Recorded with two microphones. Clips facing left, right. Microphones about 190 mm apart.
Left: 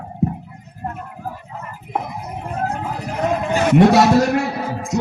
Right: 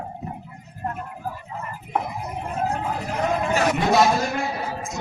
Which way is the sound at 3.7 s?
70° left (ahead or behind).